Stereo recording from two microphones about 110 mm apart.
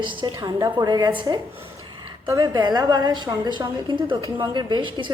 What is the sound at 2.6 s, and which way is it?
A woman's voice, 40° right (ahead or behind).